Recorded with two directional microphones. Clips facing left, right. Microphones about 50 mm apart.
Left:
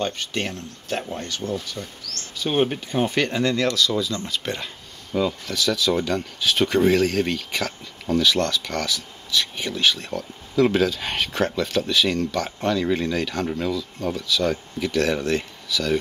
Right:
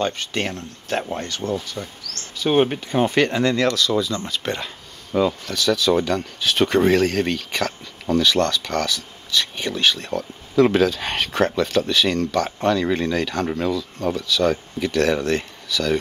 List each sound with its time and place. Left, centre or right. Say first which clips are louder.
0.0 s speech: right 3 dB; right
2.5 s speech: right 3 dB; right
3.2 s speech: right 3 dB; right
5.1 s speech: right 3 dB; right
6.4 s speech: right 1 dB; right